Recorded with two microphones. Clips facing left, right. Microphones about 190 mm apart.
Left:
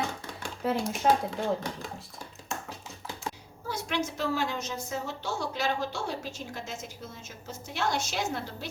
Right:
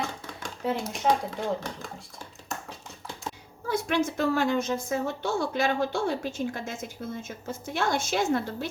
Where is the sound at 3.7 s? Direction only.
55° right (ahead or behind).